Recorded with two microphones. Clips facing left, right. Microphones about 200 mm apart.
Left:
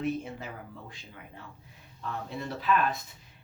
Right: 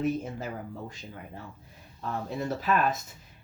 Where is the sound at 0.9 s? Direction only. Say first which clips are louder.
Right 5 dB; 45° right (ahead or behind).